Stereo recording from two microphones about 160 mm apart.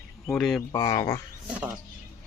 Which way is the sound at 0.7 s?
25° left (ahead or behind).